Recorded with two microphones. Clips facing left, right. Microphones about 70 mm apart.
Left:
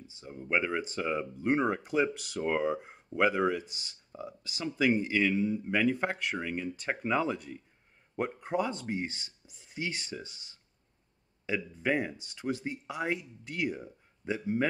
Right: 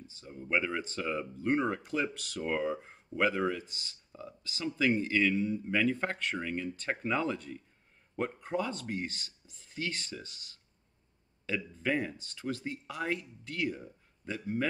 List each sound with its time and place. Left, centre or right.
0.0 s speech: centre